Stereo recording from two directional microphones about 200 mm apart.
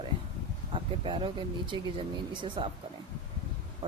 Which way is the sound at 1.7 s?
25° right (ahead or behind).